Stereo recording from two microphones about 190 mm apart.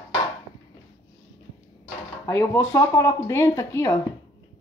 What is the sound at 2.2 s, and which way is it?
Speech, 15° left (ahead or behind).